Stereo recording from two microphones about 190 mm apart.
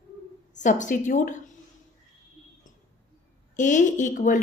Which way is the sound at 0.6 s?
40° left (ahead or behind).